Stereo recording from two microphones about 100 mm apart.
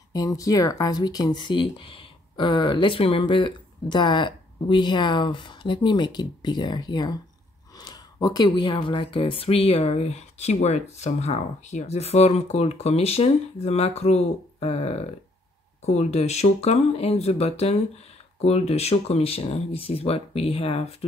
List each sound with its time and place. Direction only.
0.1 s speech: 35° left (ahead or behind)
3.0 s speech: 70° left (ahead or behind); by 20.9 s 85° left